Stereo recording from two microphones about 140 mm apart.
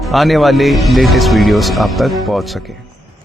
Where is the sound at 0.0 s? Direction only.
Centre (ahead or behind).